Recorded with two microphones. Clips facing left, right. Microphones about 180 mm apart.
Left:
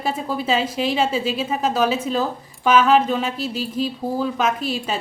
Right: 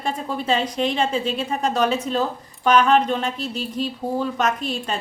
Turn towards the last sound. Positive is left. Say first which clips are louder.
# left 1 dB
turn(degrees=5)  # may be behind; listen again after turning